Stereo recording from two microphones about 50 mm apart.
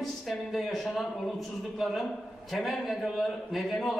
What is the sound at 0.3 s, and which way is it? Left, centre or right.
A man's voice, centre.